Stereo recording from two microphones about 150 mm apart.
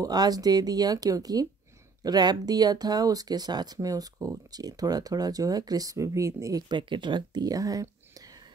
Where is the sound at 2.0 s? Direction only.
25° right (ahead or behind).